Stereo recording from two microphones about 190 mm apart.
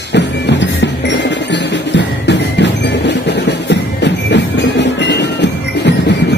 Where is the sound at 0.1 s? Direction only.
65° left (ahead or behind).